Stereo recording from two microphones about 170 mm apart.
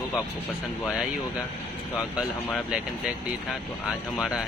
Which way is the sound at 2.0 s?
5° right (ahead or behind).